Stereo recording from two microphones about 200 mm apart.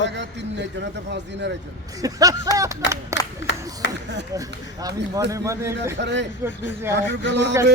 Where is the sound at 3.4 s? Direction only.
60° left (ahead or behind).